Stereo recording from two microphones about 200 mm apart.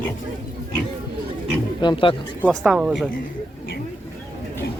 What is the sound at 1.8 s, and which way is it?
Speech, 25° left (ahead or behind).